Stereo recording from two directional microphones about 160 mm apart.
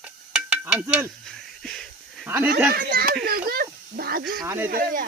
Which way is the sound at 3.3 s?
70° right (ahead or behind).